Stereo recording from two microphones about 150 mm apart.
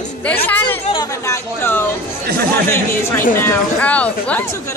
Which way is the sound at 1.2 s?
15° left (ahead or behind).